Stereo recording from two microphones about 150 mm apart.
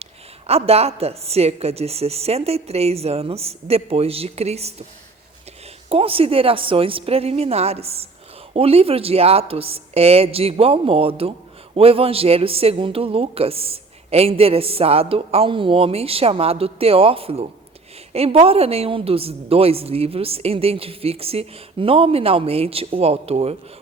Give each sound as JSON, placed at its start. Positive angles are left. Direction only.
{"t": 0.0, "sound": "a woman's voice", "side_deg": -45}
{"t": 5.9, "sound": "speech", "side_deg": -40}